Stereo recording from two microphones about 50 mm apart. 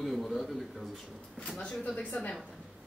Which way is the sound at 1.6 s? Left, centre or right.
Left.